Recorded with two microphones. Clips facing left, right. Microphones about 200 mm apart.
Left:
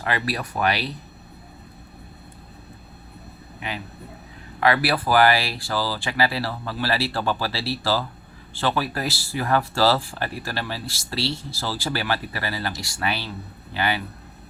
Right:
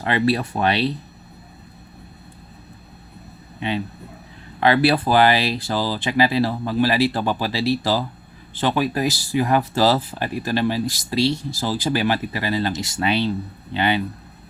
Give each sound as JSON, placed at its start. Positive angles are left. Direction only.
{"t": 0.0, "sound": "speech", "side_deg": -25}
{"t": 4.6, "sound": "speech", "side_deg": -25}